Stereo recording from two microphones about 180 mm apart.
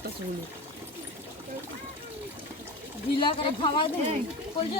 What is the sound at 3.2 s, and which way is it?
Speech, 25° left (ahead or behind).